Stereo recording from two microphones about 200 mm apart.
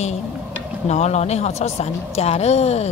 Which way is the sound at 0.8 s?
35° left (ahead or behind).